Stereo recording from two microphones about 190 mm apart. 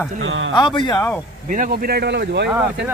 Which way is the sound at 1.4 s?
45° right (ahead or behind).